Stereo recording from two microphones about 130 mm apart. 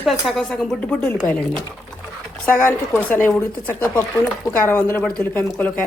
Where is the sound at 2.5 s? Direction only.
15° left (ahead or behind).